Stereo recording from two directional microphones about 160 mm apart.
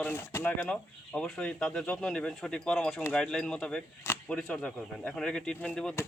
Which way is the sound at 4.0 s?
15° left (ahead or behind).